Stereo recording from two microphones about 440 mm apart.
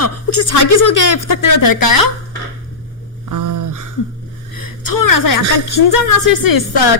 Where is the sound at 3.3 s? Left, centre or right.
Right.